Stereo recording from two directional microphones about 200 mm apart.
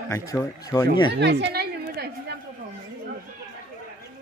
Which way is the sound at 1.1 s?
55° right (ahead or behind).